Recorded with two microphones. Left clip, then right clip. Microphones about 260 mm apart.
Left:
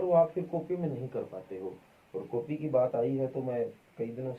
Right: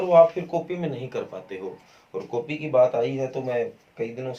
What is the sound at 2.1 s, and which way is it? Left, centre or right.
Speech, right.